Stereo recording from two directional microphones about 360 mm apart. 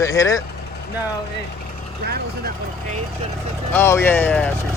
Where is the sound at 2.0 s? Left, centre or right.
Right.